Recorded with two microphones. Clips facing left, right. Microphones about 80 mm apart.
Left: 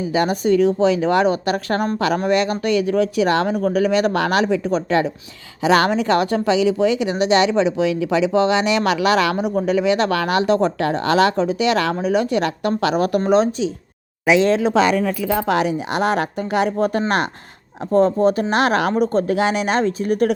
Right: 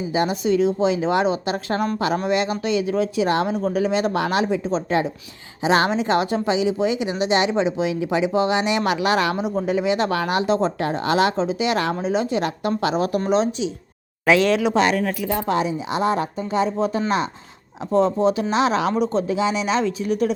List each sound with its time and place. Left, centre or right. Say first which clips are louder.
0.0 s speech: left 3 dB; left
13.2 s a woman's voice: left 4 dB; left
14.4 s speech: left 2 dB; left
15.4 s speech: left 3 dB; left
17.9 s a woman's voice: left 3 dB; left
18.5 s a woman's voice: left 2 dB; left